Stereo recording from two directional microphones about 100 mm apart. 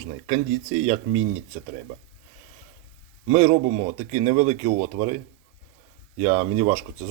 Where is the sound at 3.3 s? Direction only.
90° right.